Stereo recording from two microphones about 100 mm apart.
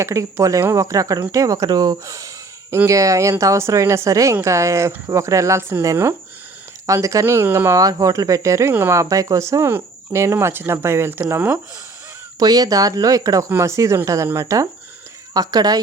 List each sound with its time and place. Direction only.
0.0 s speech: 30° right (ahead or behind)
7.8 s speech: 35° right (ahead or behind)
12.4 s speech: 40° right (ahead or behind)